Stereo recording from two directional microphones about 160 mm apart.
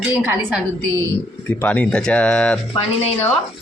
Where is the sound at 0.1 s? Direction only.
10° right (ahead or behind).